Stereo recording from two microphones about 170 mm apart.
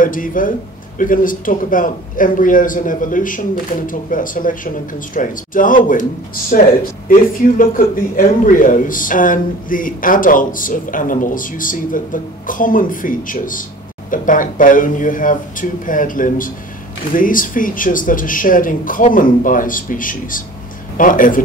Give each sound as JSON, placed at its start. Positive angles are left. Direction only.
{"t": 0.0, "sound": "speech", "side_deg": 55}